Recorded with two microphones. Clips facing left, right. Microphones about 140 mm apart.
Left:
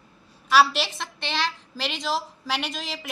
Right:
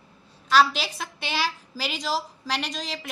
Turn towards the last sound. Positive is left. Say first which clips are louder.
# even
turn(degrees=5)  # may be behind; listen again after turning